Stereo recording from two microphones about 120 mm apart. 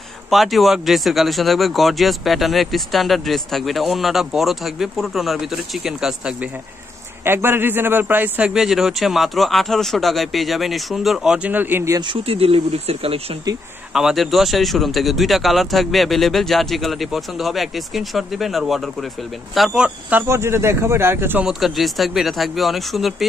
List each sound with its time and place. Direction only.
0.3 s speech: centre (ahead or behind)
7.2 s speech: 20° right (ahead or behind)
12.0 s speech: 45° right (ahead or behind)
13.9 s speech: centre (ahead or behind); by 21.5 s 20° right (ahead or behind)
21.5 s speech: centre (ahead or behind)